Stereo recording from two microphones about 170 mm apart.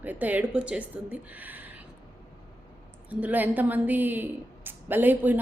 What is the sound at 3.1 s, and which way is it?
A woman's voice, 10° right (ahead or behind).